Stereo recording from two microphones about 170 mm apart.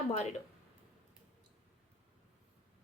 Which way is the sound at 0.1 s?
40° left (ahead or behind).